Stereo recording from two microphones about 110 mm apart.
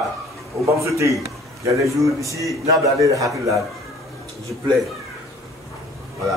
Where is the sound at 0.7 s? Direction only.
25° right (ahead or behind).